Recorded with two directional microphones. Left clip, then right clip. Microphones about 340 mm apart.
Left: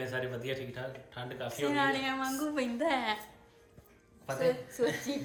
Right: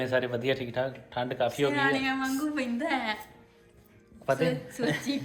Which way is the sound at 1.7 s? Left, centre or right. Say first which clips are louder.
Right 3 dB; left.